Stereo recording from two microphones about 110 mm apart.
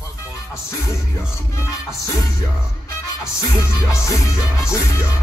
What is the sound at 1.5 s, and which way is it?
Music, 30° left (ahead or behind).